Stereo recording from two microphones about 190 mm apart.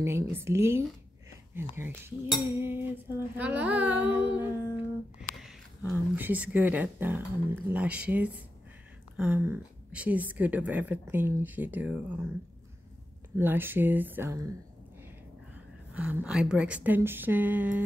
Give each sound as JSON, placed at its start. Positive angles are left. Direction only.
{"t": 0.0, "sound": "a woman's voice", "side_deg": -10}
{"t": 5.3, "sound": "a sound", "side_deg": 0}
{"t": 6.1, "sound": "a woman's voice", "side_deg": -10}
{"t": 13.4, "sound": "a woman's voice", "side_deg": -10}
{"t": 15.9, "sound": "a woman's voice", "side_deg": -5}